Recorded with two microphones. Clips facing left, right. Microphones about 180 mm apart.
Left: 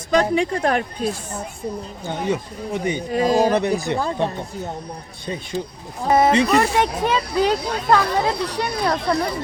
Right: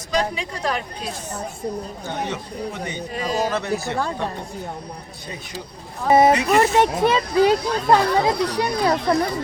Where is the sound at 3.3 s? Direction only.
15° left (ahead or behind).